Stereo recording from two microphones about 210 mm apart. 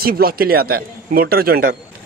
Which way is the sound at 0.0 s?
45° right (ahead or behind).